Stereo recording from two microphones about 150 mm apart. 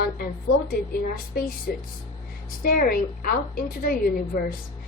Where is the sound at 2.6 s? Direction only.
80° left.